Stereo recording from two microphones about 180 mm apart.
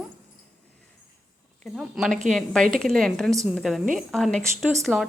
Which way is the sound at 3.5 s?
Centre (ahead or behind).